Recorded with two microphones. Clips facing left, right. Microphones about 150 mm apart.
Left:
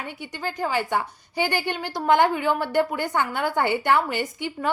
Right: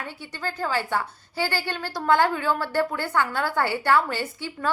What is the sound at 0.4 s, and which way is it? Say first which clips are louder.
A woman's voice: left 1 dB; 15° left (ahead or behind).